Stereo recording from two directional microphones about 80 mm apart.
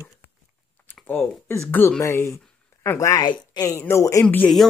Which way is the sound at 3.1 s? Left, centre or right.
Left.